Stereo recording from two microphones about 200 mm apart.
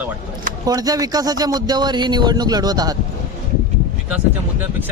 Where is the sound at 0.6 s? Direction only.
20° right (ahead or behind).